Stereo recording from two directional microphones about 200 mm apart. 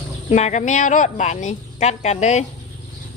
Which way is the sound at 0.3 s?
35° left (ahead or behind).